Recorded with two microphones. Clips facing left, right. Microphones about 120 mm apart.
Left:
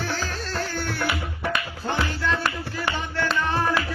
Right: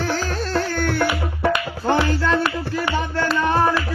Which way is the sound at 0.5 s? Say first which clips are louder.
Right 9 dB; 60° right (ahead or behind).